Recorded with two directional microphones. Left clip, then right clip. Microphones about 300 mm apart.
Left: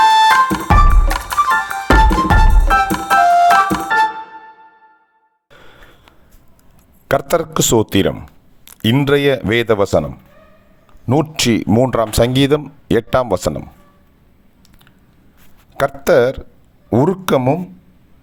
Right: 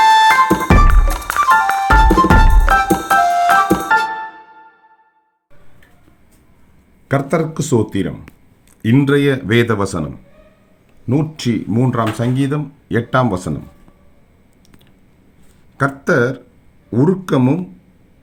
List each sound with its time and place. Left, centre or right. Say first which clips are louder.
0.0 s music: even; centre
7.1 s speech: left 2 dB; left
11.1 s speech: left 4 dB; left
15.8 s speech: left 3 dB; left